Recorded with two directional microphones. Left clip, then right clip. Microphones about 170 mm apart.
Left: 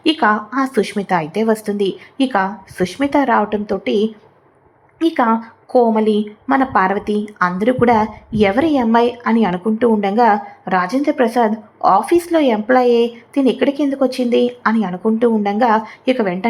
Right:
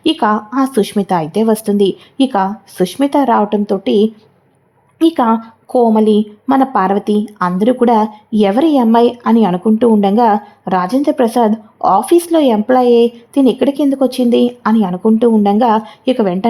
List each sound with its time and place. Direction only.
0.0 s speech: 30° right (ahead or behind)
4.9 s speech: 35° right (ahead or behind)